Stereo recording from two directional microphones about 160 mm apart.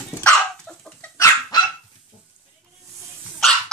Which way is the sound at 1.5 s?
25° left (ahead or behind).